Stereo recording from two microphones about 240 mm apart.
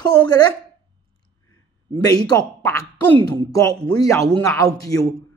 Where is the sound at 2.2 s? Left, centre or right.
Centre.